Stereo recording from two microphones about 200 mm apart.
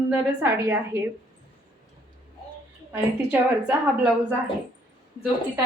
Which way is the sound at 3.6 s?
5° right (ahead or behind).